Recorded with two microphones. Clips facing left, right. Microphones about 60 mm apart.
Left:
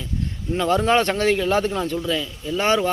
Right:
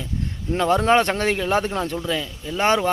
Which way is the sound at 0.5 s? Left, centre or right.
Right.